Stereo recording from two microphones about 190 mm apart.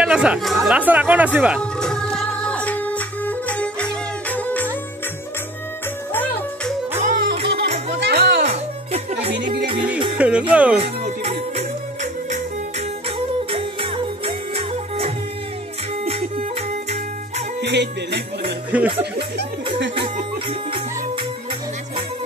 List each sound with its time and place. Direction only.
0.0 s speech: 5° right (ahead or behind)
1.6 s music: 5° left (ahead or behind)
7.0 s music: 45° right (ahead or behind)
8.0 s music: 60° right (ahead or behind)
8.5 s music: 35° right (ahead or behind)
10.1 s music: 5° right (ahead or behind)
10.5 s speech: 5° right (ahead or behind)
10.8 s music: 35° right (ahead or behind)
13.5 s music: 30° right (ahead or behind)
17.6 s music: 65° right (ahead or behind)
18.7 s speech: 5° right (ahead or behind)
19.1 s music: 60° right (ahead or behind)